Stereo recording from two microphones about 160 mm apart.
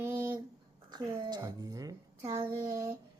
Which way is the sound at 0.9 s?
25° right (ahead or behind).